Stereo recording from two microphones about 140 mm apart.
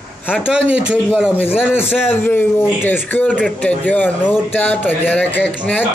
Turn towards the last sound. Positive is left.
turn(degrees=10)  # may be behind; listen again after turning